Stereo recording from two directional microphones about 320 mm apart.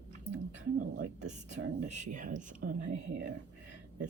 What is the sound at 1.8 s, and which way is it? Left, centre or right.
Speech, right.